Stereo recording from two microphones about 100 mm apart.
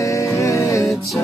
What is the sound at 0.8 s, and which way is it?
Music, centre (ahead or behind).